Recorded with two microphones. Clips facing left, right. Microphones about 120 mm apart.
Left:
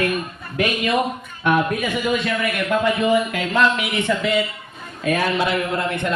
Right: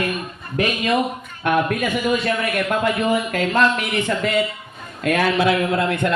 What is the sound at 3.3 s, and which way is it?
Music, 45° right (ahead or behind).